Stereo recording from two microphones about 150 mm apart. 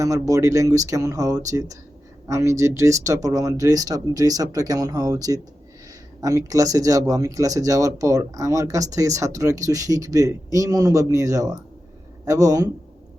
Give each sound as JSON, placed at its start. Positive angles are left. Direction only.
{"t": 0.0, "sound": "speech", "side_deg": -20}